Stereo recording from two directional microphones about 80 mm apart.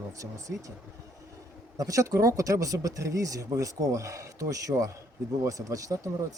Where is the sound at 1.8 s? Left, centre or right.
Right.